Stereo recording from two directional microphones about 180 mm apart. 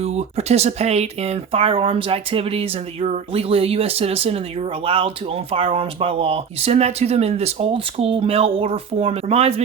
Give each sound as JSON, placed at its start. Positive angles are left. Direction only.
{"t": 0.0, "sound": "speech", "side_deg": -35}